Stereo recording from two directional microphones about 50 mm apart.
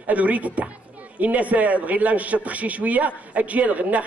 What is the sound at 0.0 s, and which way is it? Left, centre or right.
A man's voice, right.